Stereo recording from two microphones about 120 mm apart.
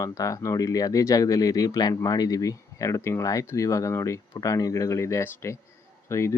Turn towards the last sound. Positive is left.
turn(degrees=25)  # may be behind; listen again after turning